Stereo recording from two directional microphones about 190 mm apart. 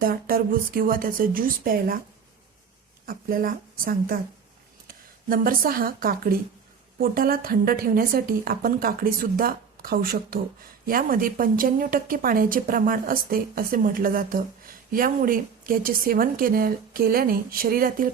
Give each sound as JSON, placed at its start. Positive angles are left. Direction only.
{"t": 0.0, "sound": "speech", "side_deg": -50}
{"t": 3.1, "sound": "speech", "side_deg": -50}